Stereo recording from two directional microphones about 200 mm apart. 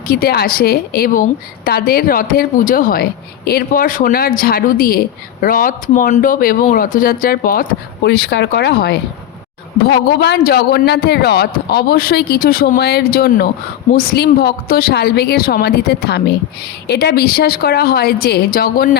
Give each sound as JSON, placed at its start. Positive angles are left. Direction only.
{"t": 0.1, "sound": "a woman's voice", "side_deg": 50}